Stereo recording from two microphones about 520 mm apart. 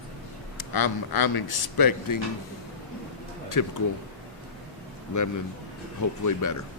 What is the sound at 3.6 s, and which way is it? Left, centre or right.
Speech, left.